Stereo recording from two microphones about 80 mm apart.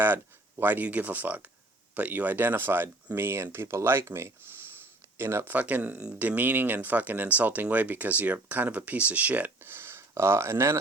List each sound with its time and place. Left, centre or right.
0.6 s speech: right
5.5 s speech: centre
9.7 s speech: right